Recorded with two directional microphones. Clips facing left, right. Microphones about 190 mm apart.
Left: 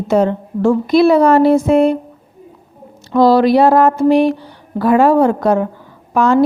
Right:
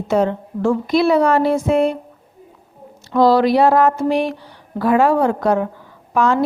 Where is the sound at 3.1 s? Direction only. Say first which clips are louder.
Left 3 dB; 30° left (ahead or behind).